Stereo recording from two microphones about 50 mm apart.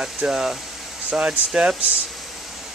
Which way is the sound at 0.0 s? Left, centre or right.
Centre.